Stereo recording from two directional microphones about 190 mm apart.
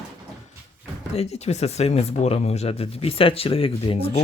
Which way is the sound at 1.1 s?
35° left (ahead or behind).